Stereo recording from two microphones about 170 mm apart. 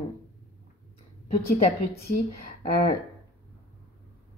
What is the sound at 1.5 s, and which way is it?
Speech, 65° left (ahead or behind).